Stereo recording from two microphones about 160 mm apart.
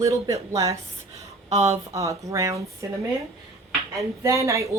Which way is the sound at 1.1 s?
40° right (ahead or behind).